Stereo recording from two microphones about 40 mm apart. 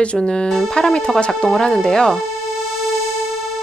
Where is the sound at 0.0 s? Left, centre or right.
Left.